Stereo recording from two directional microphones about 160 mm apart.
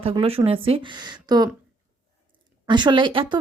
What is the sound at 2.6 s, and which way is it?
Speech, 30° right (ahead or behind).